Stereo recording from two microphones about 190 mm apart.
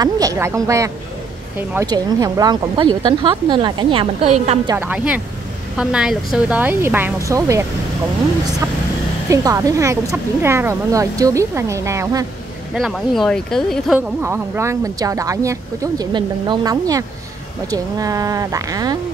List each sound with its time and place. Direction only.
0.0 s speech: 20° right (ahead or behind)
4.6 s speech: 10° right (ahead or behind)
9.3 s speech: 20° right (ahead or behind)
12.7 s speech: centre (ahead or behind)
13.9 s speech: 10° right (ahead or behind)